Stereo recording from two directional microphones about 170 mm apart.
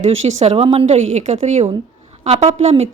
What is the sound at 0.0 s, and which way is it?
Speech, 40° right (ahead or behind).